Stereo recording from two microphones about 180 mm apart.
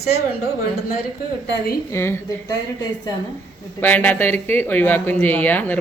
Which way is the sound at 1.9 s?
15° left (ahead or behind).